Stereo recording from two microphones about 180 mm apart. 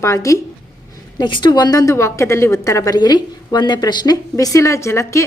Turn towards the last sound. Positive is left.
turn(degrees=15)  # may be behind; listen again after turning